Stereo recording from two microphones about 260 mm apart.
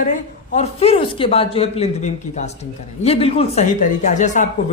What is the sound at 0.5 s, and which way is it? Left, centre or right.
Speech, left.